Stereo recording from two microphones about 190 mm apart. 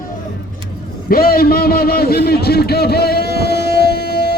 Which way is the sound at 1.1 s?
50° left (ahead or behind).